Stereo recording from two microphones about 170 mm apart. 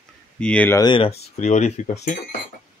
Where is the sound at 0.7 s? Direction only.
25° left (ahead or behind); by 2.1 s 45° left (ahead or behind).